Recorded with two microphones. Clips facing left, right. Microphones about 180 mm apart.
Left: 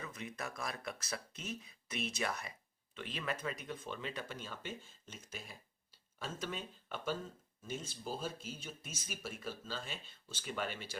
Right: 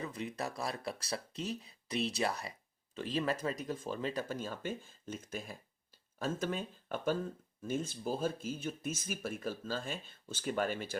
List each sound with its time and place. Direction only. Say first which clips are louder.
0.0 s speech: right 6 dB; 30° right (ahead or behind)